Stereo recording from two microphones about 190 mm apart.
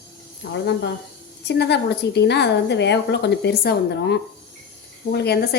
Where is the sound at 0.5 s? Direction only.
70° left (ahead or behind).